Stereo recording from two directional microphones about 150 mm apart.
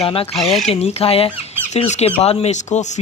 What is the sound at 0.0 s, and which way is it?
Speech, 40° left (ahead or behind).